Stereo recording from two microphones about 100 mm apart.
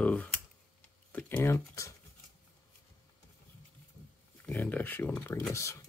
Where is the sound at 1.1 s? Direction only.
15° left (ahead or behind).